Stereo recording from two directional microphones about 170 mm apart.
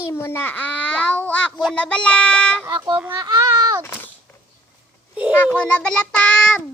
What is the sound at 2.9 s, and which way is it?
Speech, 10° right (ahead or behind).